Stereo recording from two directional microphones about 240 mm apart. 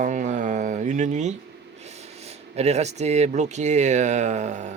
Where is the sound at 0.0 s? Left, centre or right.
Right.